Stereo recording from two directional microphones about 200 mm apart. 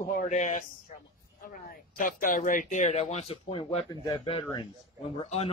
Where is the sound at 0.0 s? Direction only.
40° left (ahead or behind).